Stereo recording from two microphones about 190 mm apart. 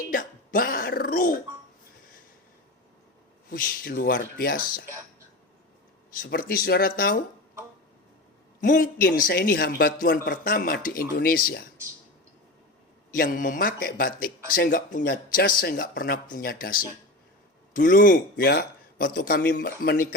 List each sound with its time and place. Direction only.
0.1 s a sound: 45° left (ahead or behind)
3.5 s speech: 50° left (ahead or behind)
6.1 s speech: 50° left (ahead or behind)
8.6 s speech: 45° left (ahead or behind)
13.1 s speech: 45° left (ahead or behind)
17.7 s speech: 45° left (ahead or behind)